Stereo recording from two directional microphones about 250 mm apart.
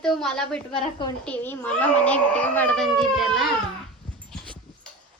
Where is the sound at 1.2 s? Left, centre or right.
Centre.